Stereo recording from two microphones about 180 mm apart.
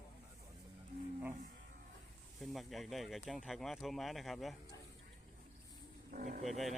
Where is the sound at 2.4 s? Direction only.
Centre (ahead or behind).